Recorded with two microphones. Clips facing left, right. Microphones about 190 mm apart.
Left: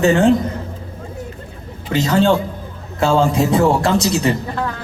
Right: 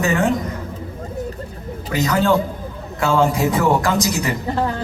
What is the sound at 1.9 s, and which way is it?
A man's voice, 30° left (ahead or behind).